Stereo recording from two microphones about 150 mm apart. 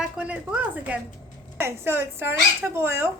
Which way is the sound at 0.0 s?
10° right (ahead or behind).